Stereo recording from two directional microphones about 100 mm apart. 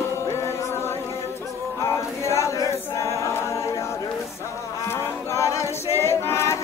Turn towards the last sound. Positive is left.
turn(degrees=25)  # may be behind; listen again after turning